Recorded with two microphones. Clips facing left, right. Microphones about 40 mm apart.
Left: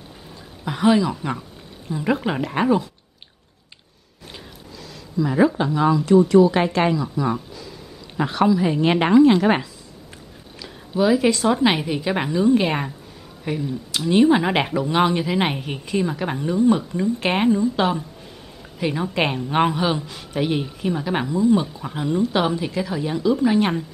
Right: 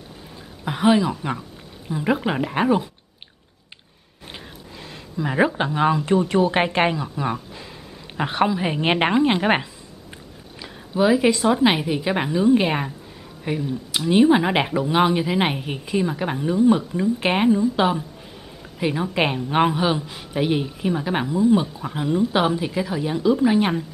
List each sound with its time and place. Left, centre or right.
0.7 s a woman's voice: centre
4.8 s a sound: right
5.6 s a woman's voice: right
10.6 s a woman's voice: centre